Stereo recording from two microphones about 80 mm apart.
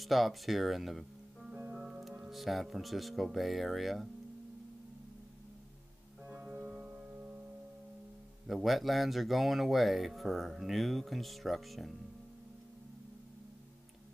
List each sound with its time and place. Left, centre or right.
0.0 s speech: centre
1.7 s music: centre
2.2 s speech: centre
6.2 s music: centre
8.5 s speech: centre